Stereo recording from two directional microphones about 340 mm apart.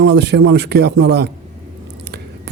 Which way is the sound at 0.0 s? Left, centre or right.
Right.